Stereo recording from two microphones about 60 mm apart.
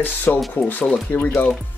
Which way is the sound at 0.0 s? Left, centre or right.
Left.